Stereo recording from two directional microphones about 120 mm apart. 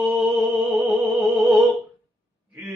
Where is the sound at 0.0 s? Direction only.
Centre (ahead or behind).